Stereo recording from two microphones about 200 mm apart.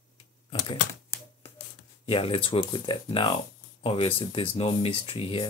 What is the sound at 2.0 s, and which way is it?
Speech, 25° left (ahead or behind).